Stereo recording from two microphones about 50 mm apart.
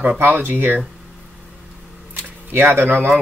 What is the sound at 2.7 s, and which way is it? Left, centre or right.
Speech, right.